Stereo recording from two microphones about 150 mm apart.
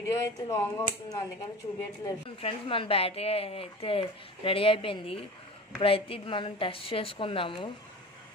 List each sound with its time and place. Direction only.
0.0 s speech: 20° left (ahead or behind)
2.4 s a woman's voice: 35° left (ahead or behind)